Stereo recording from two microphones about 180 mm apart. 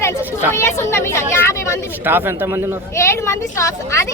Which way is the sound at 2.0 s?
10° right (ahead or behind).